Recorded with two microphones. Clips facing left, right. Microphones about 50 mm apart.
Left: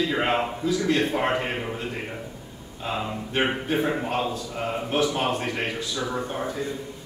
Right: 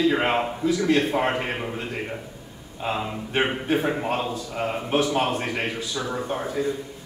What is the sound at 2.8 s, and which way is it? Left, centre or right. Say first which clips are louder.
A man's voice: right 2 dB; centre.